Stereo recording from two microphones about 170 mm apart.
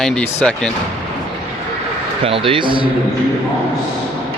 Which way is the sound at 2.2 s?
30° right (ahead or behind).